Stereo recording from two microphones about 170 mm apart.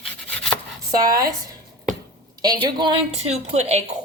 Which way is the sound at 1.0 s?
20° right (ahead or behind).